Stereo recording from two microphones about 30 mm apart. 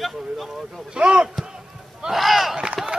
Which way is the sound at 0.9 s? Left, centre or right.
Right.